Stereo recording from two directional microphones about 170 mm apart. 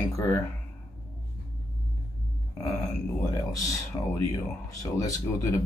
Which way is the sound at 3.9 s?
25° left (ahead or behind).